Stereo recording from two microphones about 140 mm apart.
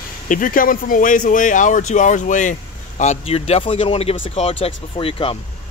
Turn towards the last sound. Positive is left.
turn(degrees=40)  # may be behind; listen again after turning